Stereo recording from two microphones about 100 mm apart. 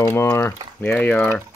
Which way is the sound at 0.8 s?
15° left (ahead or behind).